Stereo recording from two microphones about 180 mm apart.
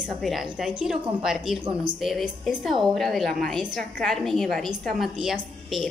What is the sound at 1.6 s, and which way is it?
Speech, 30° right (ahead or behind).